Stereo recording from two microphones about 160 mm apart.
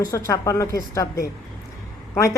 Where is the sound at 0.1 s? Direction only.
20° left (ahead or behind).